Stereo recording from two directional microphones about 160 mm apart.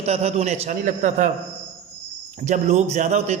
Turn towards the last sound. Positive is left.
turn(degrees=-45)  # may be behind; listen again after turning